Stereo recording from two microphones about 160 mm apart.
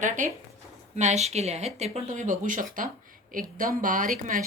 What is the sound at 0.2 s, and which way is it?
Speech, 55° right (ahead or behind).